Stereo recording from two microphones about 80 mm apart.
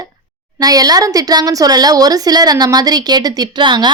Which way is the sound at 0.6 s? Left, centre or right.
Right.